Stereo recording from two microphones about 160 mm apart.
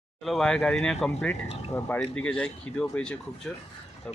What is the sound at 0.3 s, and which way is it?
Speech, 5° left (ahead or behind).